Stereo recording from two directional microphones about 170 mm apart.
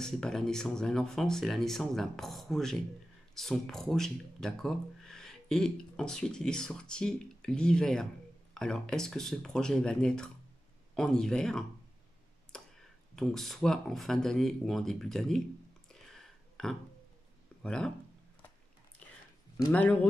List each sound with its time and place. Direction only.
0.0 s speech: 5° left (ahead or behind)
12.5 s clicking: 5° left (ahead or behind)
13.1 s speech: 5° left (ahead or behind)
15.9 s a sound: 5° left (ahead or behind)
17.6 s speech: 5° left (ahead or behind)
19.0 s a sound: 10° left (ahead or behind)
19.7 s speech: 10° left (ahead or behind)